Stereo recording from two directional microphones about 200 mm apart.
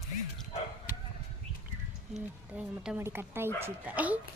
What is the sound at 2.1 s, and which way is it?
Speech, 5° right (ahead or behind).